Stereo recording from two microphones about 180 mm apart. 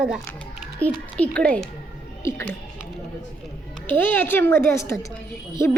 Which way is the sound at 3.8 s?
10° left (ahead or behind).